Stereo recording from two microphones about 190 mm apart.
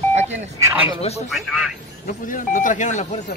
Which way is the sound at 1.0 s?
35° left (ahead or behind).